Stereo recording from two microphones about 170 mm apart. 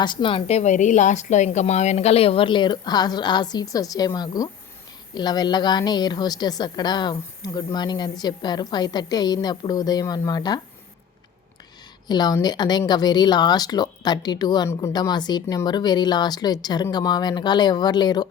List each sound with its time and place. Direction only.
0.0 s speech: 30° left (ahead or behind)
12.0 s speech: 25° left (ahead or behind)